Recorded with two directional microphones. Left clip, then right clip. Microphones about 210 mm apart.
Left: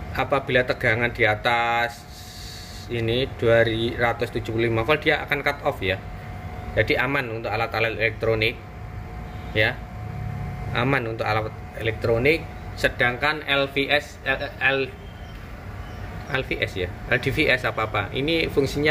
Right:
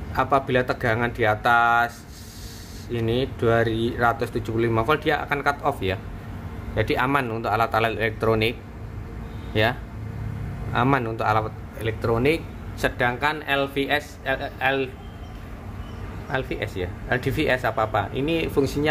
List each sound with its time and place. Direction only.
0.1 s speech: 5° right (ahead or behind)
16.3 s speech: centre (ahead or behind)